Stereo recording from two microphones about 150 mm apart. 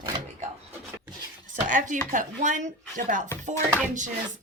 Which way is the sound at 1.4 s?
60° right (ahead or behind).